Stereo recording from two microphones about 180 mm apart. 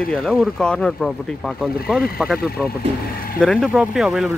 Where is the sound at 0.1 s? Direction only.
Centre (ahead or behind).